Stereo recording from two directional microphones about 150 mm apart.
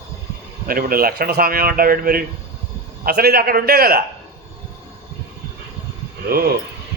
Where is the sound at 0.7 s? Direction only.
75° right (ahead or behind).